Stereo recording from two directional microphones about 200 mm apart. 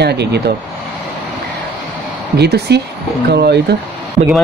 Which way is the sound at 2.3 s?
55° right (ahead or behind).